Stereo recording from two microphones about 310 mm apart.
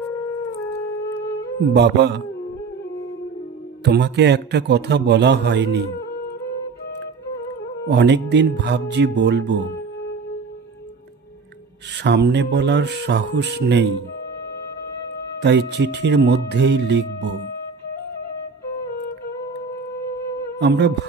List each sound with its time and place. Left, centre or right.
1.7 s a man's voice: right
3.8 s a man's voice: right
7.9 s a man's voice: right
12.0 s a man's voice: right
15.4 s a man's voice: right
20.5 s speech: right